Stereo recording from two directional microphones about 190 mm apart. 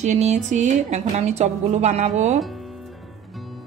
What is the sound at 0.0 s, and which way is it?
A woman's voice, 35° right (ahead or behind).